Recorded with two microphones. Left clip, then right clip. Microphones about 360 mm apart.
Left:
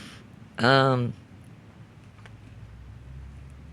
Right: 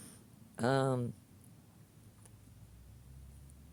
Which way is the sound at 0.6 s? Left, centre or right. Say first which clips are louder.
Left 12 dB; right.